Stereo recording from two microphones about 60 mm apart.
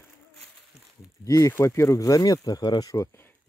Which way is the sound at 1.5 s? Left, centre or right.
Left.